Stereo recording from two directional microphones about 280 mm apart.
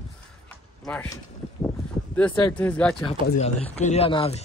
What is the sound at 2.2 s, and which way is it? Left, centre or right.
Speech, centre.